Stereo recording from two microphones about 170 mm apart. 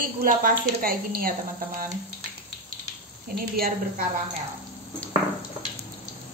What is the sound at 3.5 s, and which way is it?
Speech, 60° right (ahead or behind).